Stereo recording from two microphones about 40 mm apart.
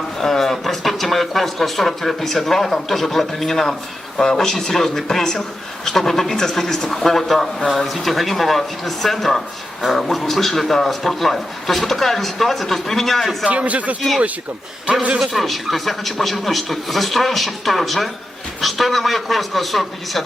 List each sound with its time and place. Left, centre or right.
0.2 s speech: centre
13.5 s a man's voice: right
15.3 s speech: centre